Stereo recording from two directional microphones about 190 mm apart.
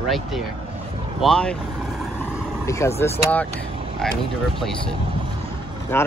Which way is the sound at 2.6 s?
15° left (ahead or behind).